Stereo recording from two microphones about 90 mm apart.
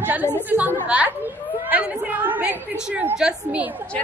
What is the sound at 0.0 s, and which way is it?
A woman's voice, 20° right (ahead or behind).